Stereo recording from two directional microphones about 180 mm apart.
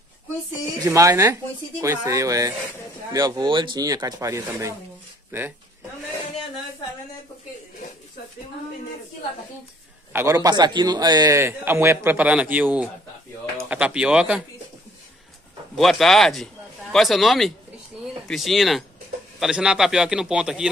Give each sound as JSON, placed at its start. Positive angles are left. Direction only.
{"t": 0.8, "sound": "a man's voice", "side_deg": -15}
{"t": 10.1, "sound": "a man's voice", "side_deg": -20}
{"t": 15.7, "sound": "a man's voice", "side_deg": 0}